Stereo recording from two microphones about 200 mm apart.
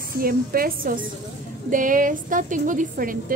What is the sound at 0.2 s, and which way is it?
A woman's voice, 45° right (ahead or behind).